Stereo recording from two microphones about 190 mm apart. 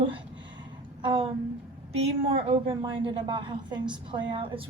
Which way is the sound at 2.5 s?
25° right (ahead or behind).